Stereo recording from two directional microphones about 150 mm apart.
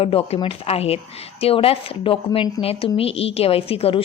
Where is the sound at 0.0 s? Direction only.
40° left (ahead or behind).